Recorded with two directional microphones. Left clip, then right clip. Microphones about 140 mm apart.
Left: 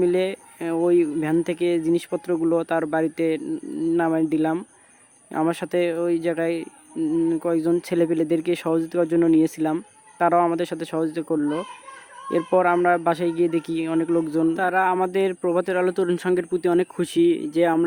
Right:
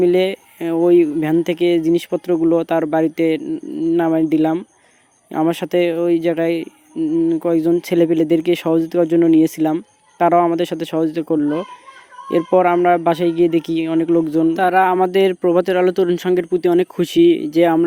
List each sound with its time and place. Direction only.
0.0 s speech: 25° right (ahead or behind)
14.5 s speech: 40° right (ahead or behind)